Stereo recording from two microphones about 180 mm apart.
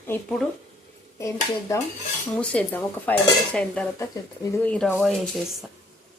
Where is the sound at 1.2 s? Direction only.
15° left (ahead or behind).